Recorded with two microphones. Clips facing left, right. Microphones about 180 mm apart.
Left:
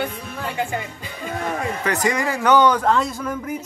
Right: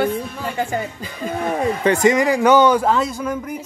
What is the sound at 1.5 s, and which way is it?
A man's voice, 25° right (ahead or behind).